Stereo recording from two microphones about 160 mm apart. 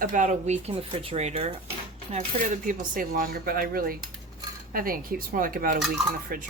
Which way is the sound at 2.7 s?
60° right (ahead or behind).